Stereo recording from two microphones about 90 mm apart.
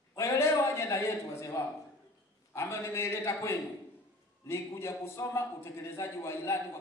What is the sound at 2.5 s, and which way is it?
A man's voice, 30° left (ahead or behind).